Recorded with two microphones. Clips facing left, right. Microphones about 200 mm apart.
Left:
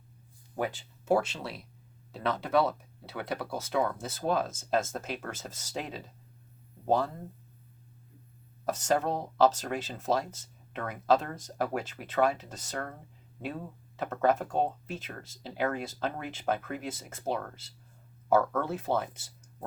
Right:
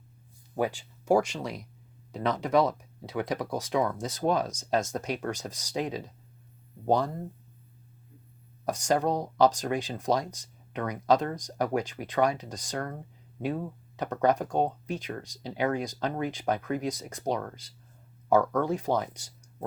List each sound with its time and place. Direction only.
0.5 s speech: 15° right (ahead or behind)
8.6 s speech: 15° right (ahead or behind)
14.0 s speech: 15° right (ahead or behind)